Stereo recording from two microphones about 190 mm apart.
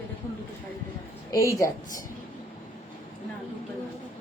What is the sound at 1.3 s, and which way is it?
Speech, 15° left (ahead or behind).